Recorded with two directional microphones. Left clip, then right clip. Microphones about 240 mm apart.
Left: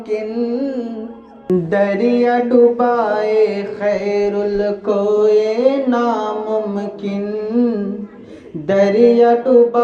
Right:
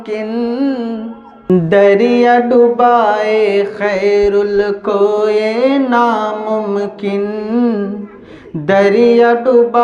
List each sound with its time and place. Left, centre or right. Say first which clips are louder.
0.1 s music: right 2 dB; right